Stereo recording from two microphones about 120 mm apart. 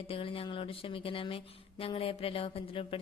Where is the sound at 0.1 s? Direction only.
50° left (ahead or behind).